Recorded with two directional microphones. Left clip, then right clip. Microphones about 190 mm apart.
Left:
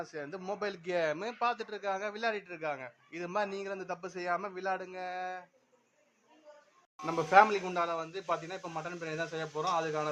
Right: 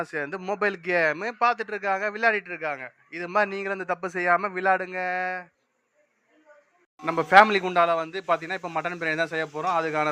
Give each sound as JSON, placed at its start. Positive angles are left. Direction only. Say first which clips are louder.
{"t": 0.0, "sound": "a man's voice", "louder": "right 10 dB", "side_deg": -20}
{"t": 7.0, "sound": "a man's voice", "louder": "right 8 dB", "side_deg": -20}